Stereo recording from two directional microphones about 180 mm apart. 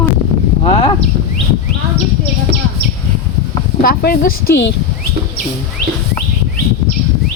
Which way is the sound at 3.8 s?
55° left (ahead or behind).